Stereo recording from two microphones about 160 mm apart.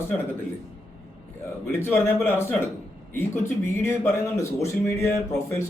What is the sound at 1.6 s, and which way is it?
Speech, 15° left (ahead or behind).